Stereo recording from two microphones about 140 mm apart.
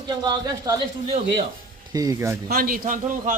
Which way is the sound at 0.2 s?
25° right (ahead or behind).